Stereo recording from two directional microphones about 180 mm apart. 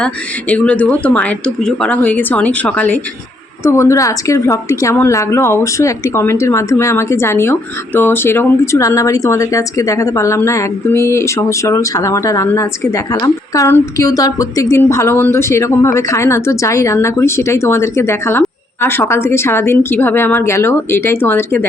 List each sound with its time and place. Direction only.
0.0 s speech: 5° left (ahead or behind)